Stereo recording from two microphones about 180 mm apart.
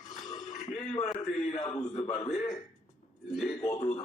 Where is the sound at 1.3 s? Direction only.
40° left (ahead or behind).